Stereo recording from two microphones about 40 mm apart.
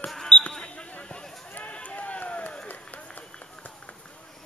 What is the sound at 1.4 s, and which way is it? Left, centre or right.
Run, left.